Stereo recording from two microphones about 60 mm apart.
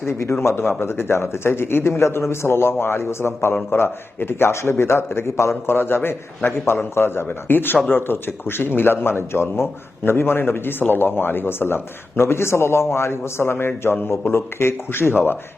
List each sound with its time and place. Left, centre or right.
0.1 s a man's voice: left